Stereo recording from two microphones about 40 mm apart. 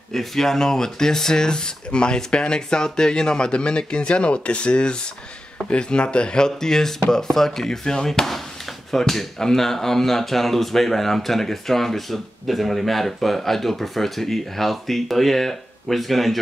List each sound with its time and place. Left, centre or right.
0.1 s speech: centre